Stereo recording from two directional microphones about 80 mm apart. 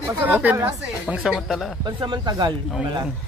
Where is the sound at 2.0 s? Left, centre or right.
Right.